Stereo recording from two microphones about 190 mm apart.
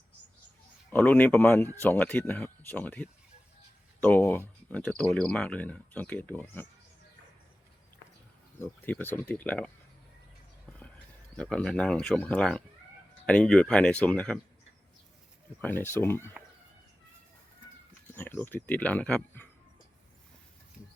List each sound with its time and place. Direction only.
0.9 s speech: 10° left (ahead or behind)
8.6 s speech: 10° left (ahead or behind)
11.3 s speech: 5° left (ahead or behind)
15.6 s speech: 10° left (ahead or behind)
18.1 s speech: 10° left (ahead or behind)